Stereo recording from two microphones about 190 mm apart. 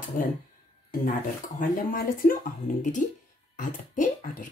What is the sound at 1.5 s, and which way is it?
A child's voice, 45° left (ahead or behind).